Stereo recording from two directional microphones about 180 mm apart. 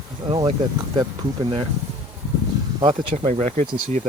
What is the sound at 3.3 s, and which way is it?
Speech, 35° right (ahead or behind).